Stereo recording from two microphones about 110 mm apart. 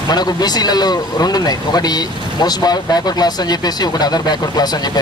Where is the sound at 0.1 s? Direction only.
40° left (ahead or behind).